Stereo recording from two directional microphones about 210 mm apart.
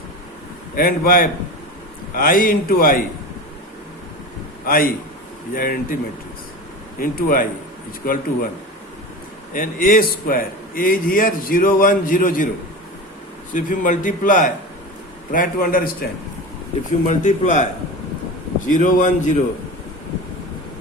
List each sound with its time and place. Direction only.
0.8 s a man's voice: 45° left (ahead or behind)
4.6 s a man's voice: 45° left (ahead or behind)
7.0 s a man's voice: 45° left (ahead or behind)
9.5 s a man's voice: 40° left (ahead or behind)
13.5 s a man's voice: 40° left (ahead or behind)
17.1 s a man's voice: 35° left (ahead or behind)
18.7 s a man's voice: 35° left (ahead or behind)